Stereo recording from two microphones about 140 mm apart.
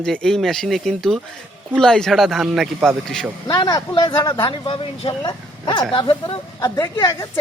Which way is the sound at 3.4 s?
30° left (ahead or behind).